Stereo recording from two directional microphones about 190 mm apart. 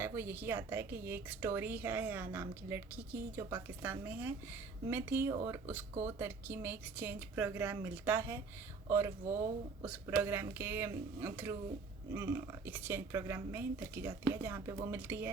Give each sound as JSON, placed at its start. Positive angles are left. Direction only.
{"t": 0.0, "sound": "a woman's voice", "side_deg": -10}